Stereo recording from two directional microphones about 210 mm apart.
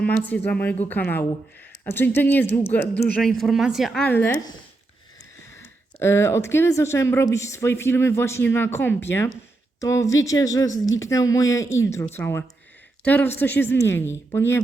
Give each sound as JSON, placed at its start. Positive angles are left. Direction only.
{"t": 0.0, "sound": "speech", "side_deg": 10}
{"t": 5.5, "sound": "speech", "side_deg": 10}